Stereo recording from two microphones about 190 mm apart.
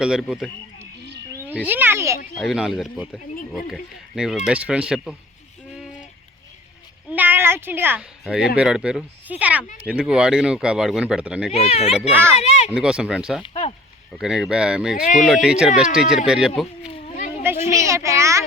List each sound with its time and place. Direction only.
0.0 s speech: 5° right (ahead or behind)
1.6 s a child's voice: 10° right (ahead or behind)
2.3 s speech: centre (ahead or behind)
7.1 s a sound: 10° right (ahead or behind)
8.5 s a child's voice: 5° right (ahead or behind)
11.5 s speech: 30° left (ahead or behind)
12.4 s a sound: 35° left (ahead or behind)
12.7 s speech: 5° right (ahead or behind)
13.4 s speech: 30° left (ahead or behind)
14.2 s speech: 5° right (ahead or behind)
17.2 s a sound: 40° left (ahead or behind)
17.7 s a sound: 15° right (ahead or behind)